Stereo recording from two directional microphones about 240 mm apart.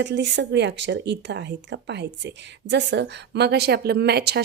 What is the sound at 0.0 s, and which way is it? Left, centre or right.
Speech, right.